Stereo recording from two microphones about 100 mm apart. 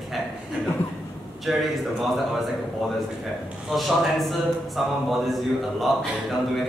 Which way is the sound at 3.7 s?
Centre (ahead or behind).